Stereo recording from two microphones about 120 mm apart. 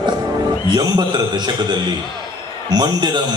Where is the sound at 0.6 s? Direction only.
35° right (ahead or behind).